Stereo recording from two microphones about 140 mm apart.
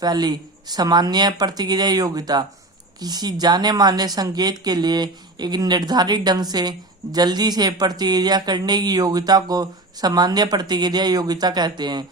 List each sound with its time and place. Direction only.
0.0 s speech: 30° right (ahead or behind)